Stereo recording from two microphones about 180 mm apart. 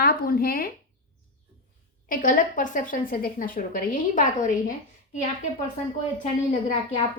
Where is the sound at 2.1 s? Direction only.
50° left (ahead or behind).